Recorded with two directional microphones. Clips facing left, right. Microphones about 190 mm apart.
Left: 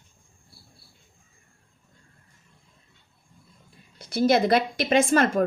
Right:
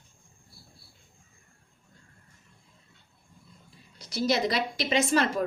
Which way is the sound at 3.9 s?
55° left (ahead or behind).